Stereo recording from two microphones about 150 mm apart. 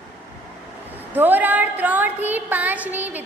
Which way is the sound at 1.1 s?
10° right (ahead or behind).